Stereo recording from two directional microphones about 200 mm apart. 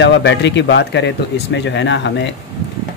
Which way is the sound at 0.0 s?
60° left (ahead or behind).